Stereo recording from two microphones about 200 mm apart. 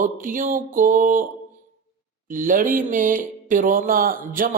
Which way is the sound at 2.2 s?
40° right (ahead or behind).